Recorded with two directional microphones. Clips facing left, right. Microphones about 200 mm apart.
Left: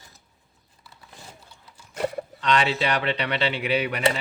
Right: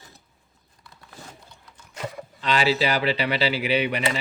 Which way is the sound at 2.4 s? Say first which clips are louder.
Right 1 dB; 5° right (ahead or behind).